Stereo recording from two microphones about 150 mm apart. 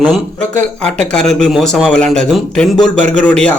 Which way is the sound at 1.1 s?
5° left (ahead or behind).